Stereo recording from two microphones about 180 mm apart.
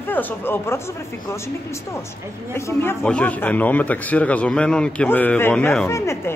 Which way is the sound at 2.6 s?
15° left (ahead or behind).